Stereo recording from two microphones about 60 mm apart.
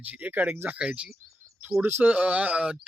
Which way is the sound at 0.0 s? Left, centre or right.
Right.